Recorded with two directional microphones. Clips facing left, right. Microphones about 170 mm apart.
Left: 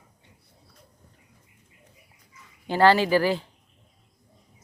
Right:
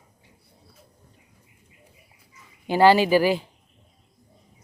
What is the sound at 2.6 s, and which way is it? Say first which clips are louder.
Speech: right 2 dB; 10° right (ahead or behind).